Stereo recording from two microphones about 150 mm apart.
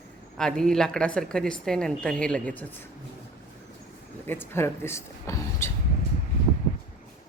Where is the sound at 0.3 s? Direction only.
5° left (ahead or behind).